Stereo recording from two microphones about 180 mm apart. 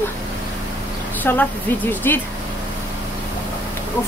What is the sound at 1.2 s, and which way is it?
Speech, 10° left (ahead or behind).